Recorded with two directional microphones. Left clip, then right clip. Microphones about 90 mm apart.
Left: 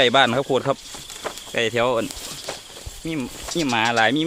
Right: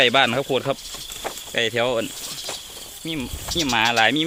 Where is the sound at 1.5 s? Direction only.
40° left (ahead or behind).